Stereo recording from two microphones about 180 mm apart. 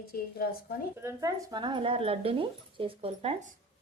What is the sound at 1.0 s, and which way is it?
Speech, 20° right (ahead or behind).